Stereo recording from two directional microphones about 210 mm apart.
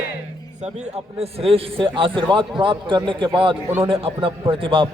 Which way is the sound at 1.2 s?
25° right (ahead or behind).